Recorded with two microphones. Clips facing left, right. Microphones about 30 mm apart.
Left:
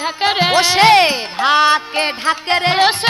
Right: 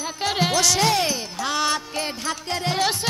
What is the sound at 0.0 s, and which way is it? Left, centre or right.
Speech, left.